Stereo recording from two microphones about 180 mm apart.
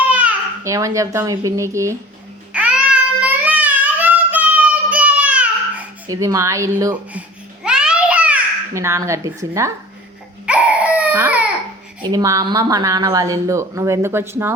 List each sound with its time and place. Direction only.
0.0 s a child's voice: 10° right (ahead or behind)
2.5 s child singing: 5° right (ahead or behind)
6.1 s speech: 20° right (ahead or behind)
6.9 s babbling: 5° right (ahead or behind)
10.4 s crying: 5° right (ahead or behind)
12.0 s speech: 20° right (ahead or behind)